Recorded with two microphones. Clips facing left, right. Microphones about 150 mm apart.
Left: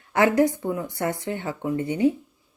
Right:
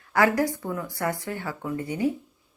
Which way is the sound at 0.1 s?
20° left (ahead or behind).